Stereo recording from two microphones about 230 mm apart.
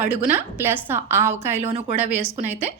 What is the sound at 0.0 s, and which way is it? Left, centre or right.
A woman's voice, centre.